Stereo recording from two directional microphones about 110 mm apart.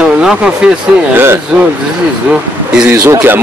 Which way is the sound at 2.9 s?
20° right (ahead or behind).